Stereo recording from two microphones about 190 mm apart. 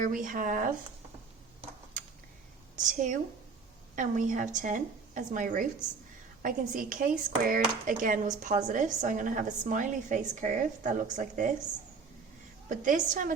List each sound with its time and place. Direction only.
0.0 s speech: 45° right (ahead or behind)
2.7 s a woman's voice: 40° right (ahead or behind)
12.6 s speech: 45° right (ahead or behind)